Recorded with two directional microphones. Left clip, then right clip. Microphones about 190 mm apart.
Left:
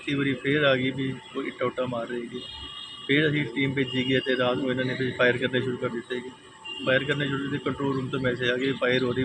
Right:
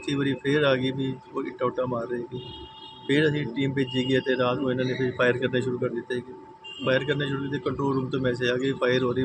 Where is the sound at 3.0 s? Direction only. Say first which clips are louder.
Even; 20° right (ahead or behind).